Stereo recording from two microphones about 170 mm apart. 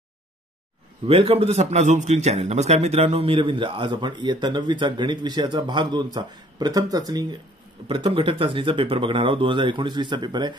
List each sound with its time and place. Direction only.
1.0 s a man's voice: 35° right (ahead or behind)